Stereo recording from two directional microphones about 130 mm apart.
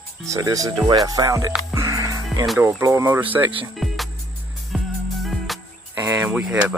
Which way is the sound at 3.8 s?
Centre (ahead or behind).